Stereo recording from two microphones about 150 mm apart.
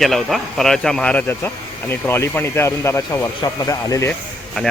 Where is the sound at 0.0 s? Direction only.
Centre (ahead or behind); by 4.1 s 20° left (ahead or behind).